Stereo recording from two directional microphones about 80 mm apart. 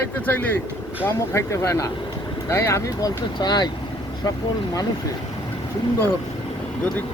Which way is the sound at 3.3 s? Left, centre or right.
Left.